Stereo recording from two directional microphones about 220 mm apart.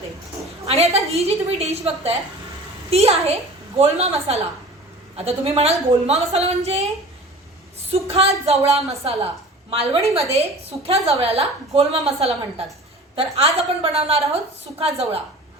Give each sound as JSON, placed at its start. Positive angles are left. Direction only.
{"t": 0.4, "sound": "a woman's voice", "side_deg": -30}
{"t": 8.1, "sound": "a woman's voice", "side_deg": -30}